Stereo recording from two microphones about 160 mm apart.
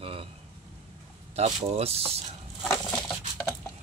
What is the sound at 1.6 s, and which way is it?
Speech, 40° right (ahead or behind).